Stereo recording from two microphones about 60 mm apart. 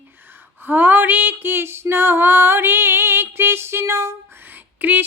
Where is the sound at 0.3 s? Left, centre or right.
Right.